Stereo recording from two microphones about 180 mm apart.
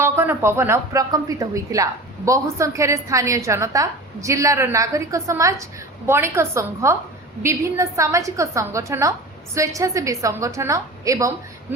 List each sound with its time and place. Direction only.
0.0 s a woman's voice: 15° right (ahead or behind)